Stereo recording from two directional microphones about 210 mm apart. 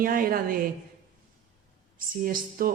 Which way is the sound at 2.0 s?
45° right (ahead or behind).